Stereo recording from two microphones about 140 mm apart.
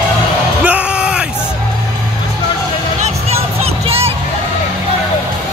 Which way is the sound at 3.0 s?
45° right (ahead or behind).